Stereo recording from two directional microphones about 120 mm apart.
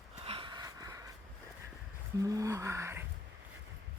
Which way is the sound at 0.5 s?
35° right (ahead or behind).